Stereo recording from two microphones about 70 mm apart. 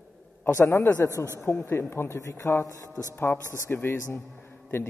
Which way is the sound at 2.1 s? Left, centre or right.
Left.